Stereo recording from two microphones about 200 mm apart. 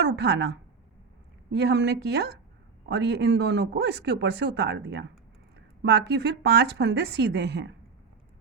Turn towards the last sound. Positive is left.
turn(degrees=-60)  # may be behind; listen again after turning